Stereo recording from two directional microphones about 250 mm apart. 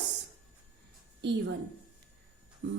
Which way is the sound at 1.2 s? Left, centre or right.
Right.